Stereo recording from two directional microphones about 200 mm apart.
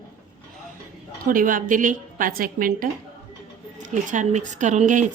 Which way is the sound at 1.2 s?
40° right (ahead or behind).